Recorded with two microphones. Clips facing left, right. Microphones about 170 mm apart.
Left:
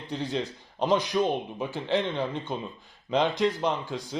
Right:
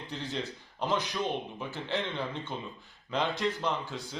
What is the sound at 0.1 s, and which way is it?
A man's voice, 15° left (ahead or behind).